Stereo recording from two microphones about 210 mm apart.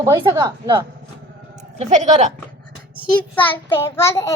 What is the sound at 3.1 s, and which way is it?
A child's voice, 10° left (ahead or behind).